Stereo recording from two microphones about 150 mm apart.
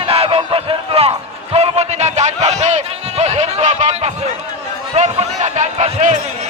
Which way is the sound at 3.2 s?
50° right (ahead or behind).